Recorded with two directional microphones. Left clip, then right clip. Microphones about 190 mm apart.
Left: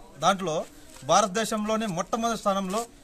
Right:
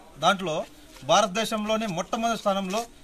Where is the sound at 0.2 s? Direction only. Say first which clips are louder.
Right 1 dB; 15° left (ahead or behind).